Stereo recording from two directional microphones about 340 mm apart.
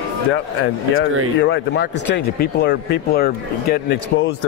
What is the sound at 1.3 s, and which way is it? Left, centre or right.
Speech, left.